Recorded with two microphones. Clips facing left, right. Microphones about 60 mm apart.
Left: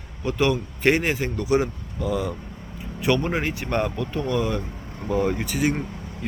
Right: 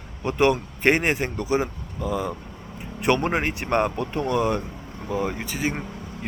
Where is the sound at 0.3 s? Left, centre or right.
Right.